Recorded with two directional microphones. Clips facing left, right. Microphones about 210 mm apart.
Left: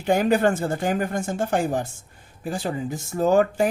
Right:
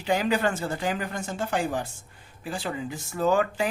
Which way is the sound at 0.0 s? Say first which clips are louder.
Left 5 dB; 50° left (ahead or behind).